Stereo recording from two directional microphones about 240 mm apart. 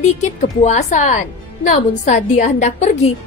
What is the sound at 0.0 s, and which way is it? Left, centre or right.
A woman's voice, left.